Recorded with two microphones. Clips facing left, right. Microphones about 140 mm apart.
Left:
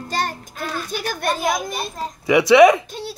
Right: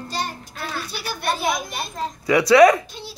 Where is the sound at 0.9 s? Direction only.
45° left (ahead or behind).